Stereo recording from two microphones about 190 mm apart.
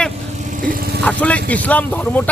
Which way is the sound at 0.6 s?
50° right (ahead or behind).